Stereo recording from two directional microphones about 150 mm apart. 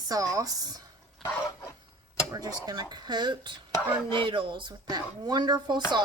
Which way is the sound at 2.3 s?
25° right (ahead or behind).